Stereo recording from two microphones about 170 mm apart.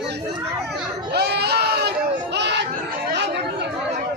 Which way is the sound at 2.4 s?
90° right.